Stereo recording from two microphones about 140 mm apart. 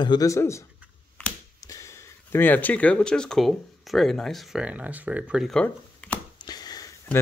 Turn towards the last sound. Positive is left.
turn(degrees=30)  # may be behind; listen again after turning